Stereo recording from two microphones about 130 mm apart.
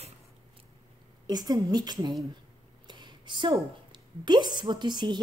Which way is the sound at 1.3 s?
30° right (ahead or behind).